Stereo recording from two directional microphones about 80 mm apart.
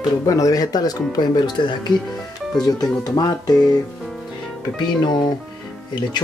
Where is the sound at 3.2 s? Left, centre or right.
Left.